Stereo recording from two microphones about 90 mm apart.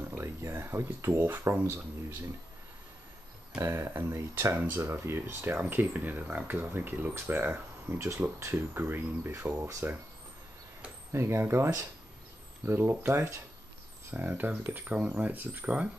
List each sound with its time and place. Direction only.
0.1 s speech: 30° right (ahead or behind)
3.6 s speech: 30° right (ahead or behind)
11.1 s speech: 30° right (ahead or behind)
14.1 s speech: 20° right (ahead or behind)